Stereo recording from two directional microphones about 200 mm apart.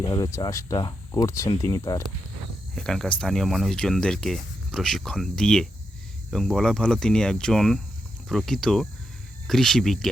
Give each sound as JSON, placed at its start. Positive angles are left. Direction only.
{"t": 0.0, "sound": "speech", "side_deg": 20}
{"t": 2.7, "sound": "speech", "side_deg": 0}